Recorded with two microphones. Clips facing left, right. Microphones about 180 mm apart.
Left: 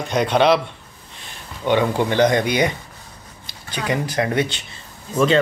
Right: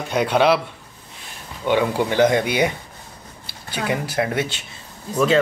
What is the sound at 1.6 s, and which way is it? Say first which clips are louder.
A woman's voice: left 1 dB; 5° right (ahead or behind).